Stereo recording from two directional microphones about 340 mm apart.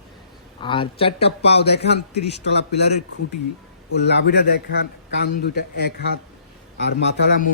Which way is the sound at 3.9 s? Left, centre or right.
Left.